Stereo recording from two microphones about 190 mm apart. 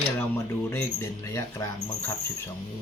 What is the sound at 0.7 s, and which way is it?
Speech, 10° left (ahead or behind).